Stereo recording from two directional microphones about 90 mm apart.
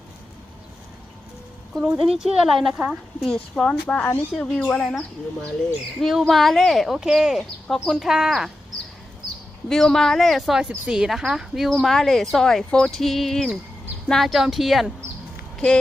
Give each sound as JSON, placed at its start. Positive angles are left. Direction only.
{"t": 2.0, "sound": "speech", "side_deg": -5}
{"t": 3.8, "sound": "speech", "side_deg": 20}
{"t": 4.4, "sound": "speech", "side_deg": 10}
{"t": 9.6, "sound": "speech", "side_deg": 5}